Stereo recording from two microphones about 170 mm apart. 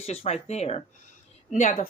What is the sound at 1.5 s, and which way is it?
Speech, 50° left (ahead or behind).